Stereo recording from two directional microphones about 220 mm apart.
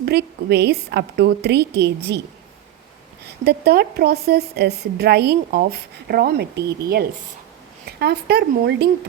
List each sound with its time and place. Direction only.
0.0 s a woman's voice: 45° right (ahead or behind)
3.2 s a woman's voice: 45° right (ahead or behind)